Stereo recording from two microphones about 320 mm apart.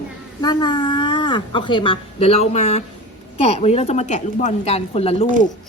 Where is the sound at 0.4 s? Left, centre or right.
Centre.